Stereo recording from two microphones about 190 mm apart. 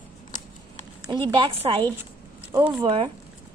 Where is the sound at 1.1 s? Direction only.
25° right (ahead or behind).